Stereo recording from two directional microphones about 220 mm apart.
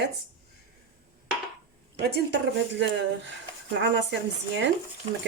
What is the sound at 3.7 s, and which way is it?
Speech, 55° right (ahead or behind).